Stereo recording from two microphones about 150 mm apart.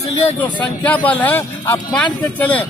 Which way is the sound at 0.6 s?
10° left (ahead or behind).